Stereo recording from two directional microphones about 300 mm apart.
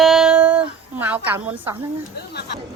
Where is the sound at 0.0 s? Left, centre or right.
Centre.